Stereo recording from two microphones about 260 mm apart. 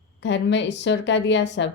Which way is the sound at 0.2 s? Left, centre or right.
Left.